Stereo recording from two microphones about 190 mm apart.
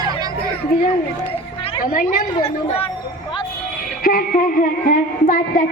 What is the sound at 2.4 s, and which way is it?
Speech, 30° left (ahead or behind).